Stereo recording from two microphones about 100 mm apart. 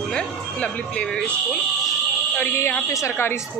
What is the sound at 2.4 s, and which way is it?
Speech, 25° left (ahead or behind).